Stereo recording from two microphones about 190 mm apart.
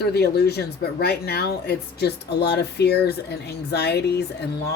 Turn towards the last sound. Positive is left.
turn(degrees=60)  # may be behind; listen again after turning